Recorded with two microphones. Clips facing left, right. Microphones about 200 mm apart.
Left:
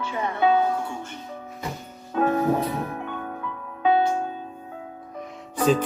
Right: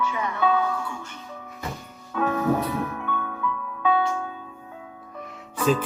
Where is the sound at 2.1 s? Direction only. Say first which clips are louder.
Left 2 dB; 35° left (ahead or behind).